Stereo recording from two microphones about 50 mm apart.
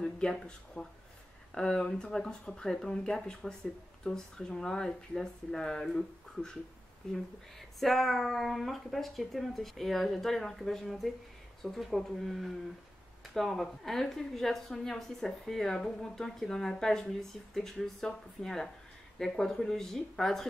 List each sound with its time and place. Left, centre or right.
0.0 s a woman's voice: centre